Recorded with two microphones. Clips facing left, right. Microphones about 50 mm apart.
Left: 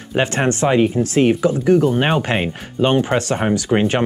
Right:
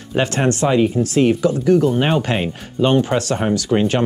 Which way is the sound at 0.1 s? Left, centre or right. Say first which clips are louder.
Even; centre.